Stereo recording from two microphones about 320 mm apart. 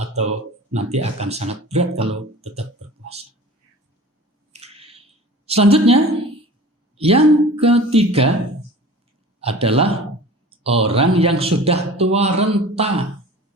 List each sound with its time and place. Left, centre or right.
0.7 s speech: centre
4.6 s squish: centre
5.5 s speech: centre
9.4 s speech: centre